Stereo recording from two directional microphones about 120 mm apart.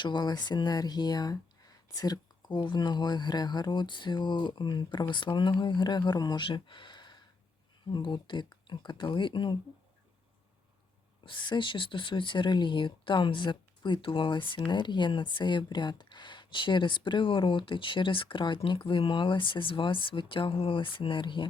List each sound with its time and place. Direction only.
0.0 s speech: 40° left (ahead or behind)
11.3 s speech: 40° left (ahead or behind)